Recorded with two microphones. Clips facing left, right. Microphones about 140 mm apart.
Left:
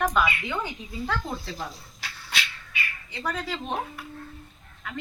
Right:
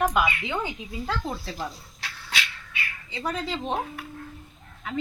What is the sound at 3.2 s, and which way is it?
Speech, 25° right (ahead or behind).